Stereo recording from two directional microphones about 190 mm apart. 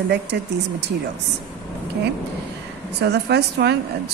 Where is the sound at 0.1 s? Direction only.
65° right (ahead or behind).